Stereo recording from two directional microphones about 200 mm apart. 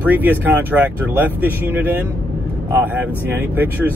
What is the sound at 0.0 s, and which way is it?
Speech, 10° right (ahead or behind).